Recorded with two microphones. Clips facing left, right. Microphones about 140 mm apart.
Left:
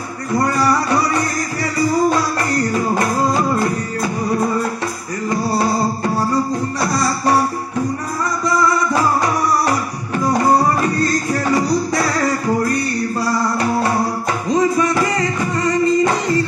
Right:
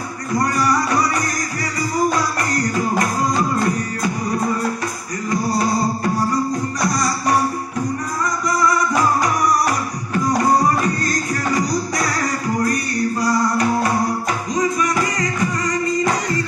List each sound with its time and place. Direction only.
14.5 s music: 30° left (ahead or behind)